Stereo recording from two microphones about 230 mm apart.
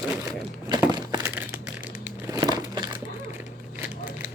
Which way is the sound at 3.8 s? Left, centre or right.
Centre.